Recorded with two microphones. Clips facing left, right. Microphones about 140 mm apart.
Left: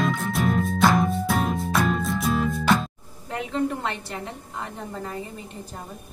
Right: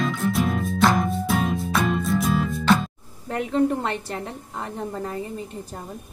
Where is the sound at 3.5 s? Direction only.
40° right (ahead or behind).